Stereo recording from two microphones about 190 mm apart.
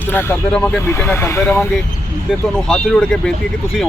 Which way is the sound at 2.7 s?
5° left (ahead or behind).